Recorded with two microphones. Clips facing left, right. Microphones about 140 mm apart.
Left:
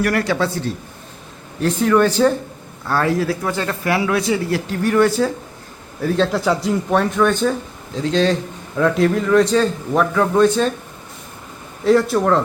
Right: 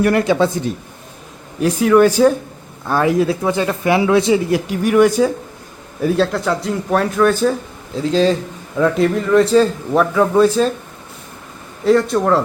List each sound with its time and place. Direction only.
0.0 s speech: 20° right (ahead or behind)
6.2 s a man's voice: centre (ahead or behind)
11.9 s a man's voice: centre (ahead or behind)